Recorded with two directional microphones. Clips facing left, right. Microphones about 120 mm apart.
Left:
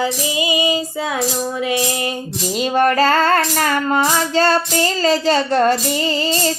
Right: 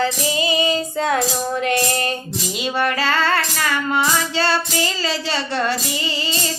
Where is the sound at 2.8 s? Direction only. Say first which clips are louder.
Left 6 dB; 45° left (ahead or behind).